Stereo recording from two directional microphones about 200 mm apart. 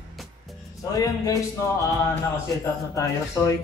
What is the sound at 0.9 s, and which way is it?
Speech, 15° left (ahead or behind).